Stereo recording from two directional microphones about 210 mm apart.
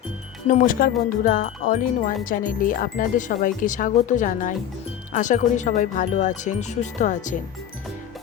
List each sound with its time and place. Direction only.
0.4 s speech: 40° left (ahead or behind)